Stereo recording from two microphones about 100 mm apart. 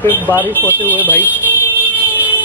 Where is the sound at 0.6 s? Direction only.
20° right (ahead or behind).